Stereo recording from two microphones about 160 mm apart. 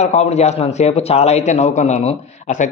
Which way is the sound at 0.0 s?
45° left (ahead or behind).